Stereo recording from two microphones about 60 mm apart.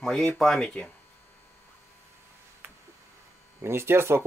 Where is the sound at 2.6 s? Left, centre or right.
Right.